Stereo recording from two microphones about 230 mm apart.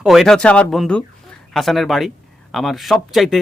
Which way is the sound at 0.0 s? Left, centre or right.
Centre.